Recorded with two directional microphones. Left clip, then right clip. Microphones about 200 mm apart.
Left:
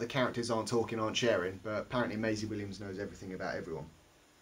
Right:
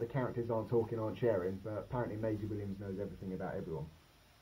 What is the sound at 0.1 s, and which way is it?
Speech, 25° left (ahead or behind).